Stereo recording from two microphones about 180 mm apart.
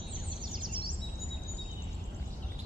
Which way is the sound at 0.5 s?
25° right (ahead or behind).